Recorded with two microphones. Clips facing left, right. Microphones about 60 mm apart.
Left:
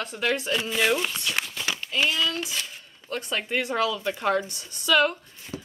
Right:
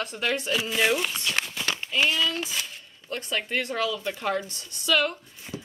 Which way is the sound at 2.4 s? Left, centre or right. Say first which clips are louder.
Even; centre.